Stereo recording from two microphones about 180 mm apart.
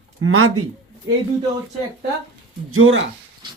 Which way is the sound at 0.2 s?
90° right.